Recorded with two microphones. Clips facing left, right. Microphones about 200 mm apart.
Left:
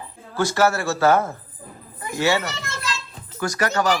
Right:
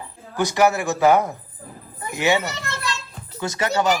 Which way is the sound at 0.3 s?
15° right (ahead or behind).